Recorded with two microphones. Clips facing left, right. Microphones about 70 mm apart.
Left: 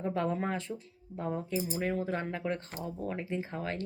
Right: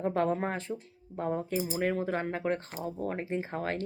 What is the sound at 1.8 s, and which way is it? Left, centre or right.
Speech, right.